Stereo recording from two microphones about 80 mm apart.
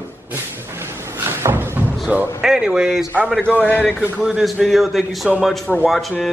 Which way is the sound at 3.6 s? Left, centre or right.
Left.